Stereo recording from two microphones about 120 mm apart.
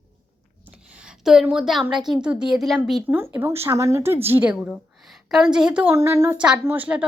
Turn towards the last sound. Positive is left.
turn(degrees=-10)  # may be behind; listen again after turning